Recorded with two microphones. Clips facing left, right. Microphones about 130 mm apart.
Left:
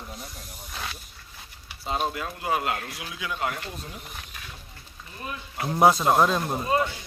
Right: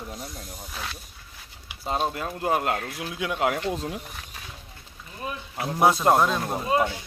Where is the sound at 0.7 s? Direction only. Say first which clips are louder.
Even; centre (ahead or behind).